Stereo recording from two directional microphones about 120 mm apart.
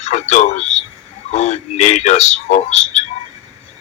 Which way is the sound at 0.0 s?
70° left (ahead or behind).